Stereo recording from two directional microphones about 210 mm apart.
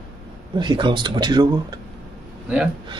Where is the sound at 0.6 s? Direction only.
20° right (ahead or behind).